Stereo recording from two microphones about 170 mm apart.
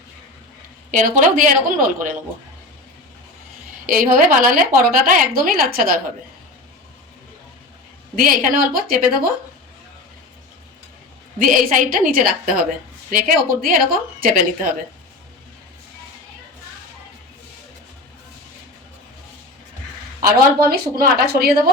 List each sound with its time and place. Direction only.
0.9 s a woman's voice: 50° right (ahead or behind)
3.8 s a woman's voice: 55° right (ahead or behind)
8.1 s a woman's voice: 55° right (ahead or behind)
11.3 s a woman's voice: 55° right (ahead or behind)
20.2 s a woman's voice: 60° right (ahead or behind)